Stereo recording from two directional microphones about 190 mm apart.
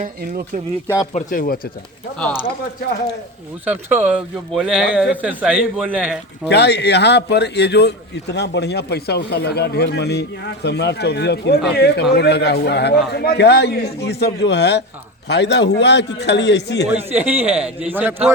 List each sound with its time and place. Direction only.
0.0 s speech: 45° right (ahead or behind)
1.1 s speech: 45° left (ahead or behind)
3.7 s a man's voice: 10° right (ahead or behind)
6.5 s a man's voice: 60° left (ahead or behind)
16.9 s a man's voice: 10° right (ahead or behind)